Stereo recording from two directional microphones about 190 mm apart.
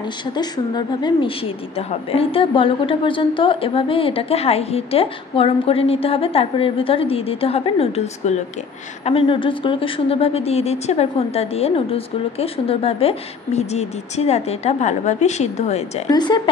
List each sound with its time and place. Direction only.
0.4 s a woman's voice: 25° left (ahead or behind)
16.1 s a woman's voice: 20° left (ahead or behind)